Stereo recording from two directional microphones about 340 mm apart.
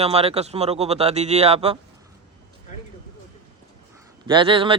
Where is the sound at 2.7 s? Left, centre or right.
Left.